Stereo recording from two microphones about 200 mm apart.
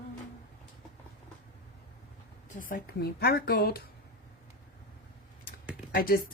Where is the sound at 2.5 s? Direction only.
45° left (ahead or behind).